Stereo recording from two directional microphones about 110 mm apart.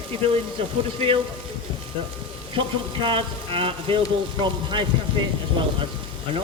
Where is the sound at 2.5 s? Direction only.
50° right (ahead or behind).